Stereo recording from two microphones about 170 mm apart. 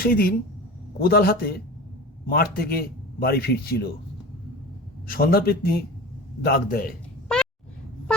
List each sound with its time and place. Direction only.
0.0 s a man's voice: 60° left (ahead or behind)
5.0 s a man's voice: 60° left (ahead or behind)
7.3 s a sound: 5° left (ahead or behind)